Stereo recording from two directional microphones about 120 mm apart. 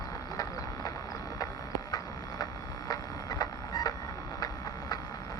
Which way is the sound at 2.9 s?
35° left (ahead or behind).